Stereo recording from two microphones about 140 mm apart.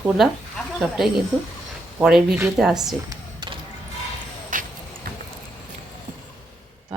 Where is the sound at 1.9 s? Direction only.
5° right (ahead or behind).